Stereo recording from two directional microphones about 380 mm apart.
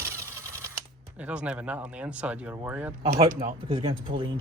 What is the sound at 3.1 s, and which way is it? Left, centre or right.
Speech, centre.